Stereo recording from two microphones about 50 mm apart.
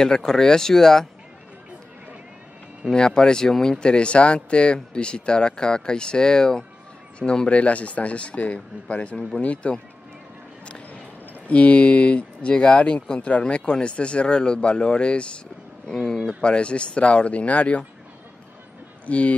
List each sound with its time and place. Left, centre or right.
0.0 s speech: centre
2.9 s speech: centre
3.8 s speech: left
11.4 s speech: left
15.9 s speech: centre; by 17.8 s left
19.0 s speech: left